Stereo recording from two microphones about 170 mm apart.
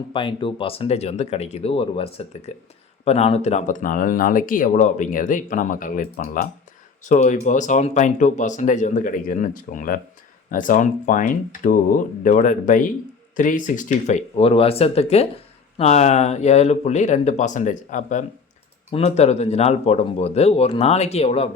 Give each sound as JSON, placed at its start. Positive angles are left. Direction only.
{"t": 0.1, "sound": "speech", "side_deg": 30}